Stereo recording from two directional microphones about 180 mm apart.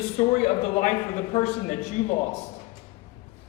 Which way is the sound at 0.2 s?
35° left (ahead or behind).